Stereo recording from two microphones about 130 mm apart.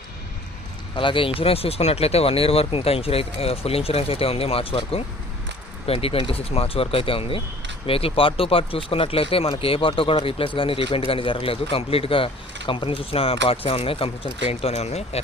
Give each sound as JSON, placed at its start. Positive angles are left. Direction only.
{"t": 0.9, "sound": "speech", "side_deg": 40}